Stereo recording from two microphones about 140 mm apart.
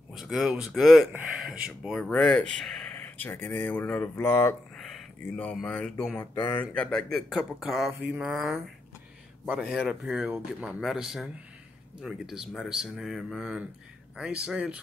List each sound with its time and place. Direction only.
0.1 s speech: centre (ahead or behind)
6.3 s mantra: 35° left (ahead or behind)
6.6 s speech: 5° left (ahead or behind)